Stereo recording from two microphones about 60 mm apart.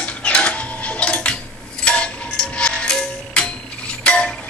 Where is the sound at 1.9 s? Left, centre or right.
Centre.